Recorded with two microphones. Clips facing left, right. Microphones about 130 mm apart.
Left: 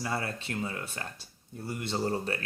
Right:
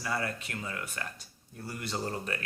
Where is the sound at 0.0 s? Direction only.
25° left (ahead or behind).